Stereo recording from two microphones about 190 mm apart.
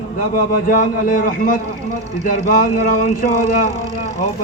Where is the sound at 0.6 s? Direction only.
45° left (ahead or behind).